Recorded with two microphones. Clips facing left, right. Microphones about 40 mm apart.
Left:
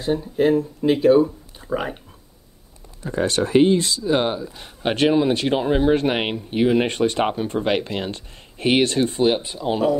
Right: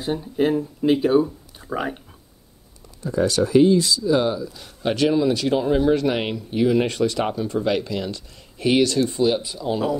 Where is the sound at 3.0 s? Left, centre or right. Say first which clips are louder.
Right 1 dB; left.